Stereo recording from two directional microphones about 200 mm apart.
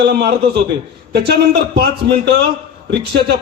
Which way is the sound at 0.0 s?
55° right (ahead or behind).